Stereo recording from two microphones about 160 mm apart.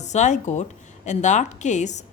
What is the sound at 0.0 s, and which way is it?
A woman's voice, 45° left (ahead or behind).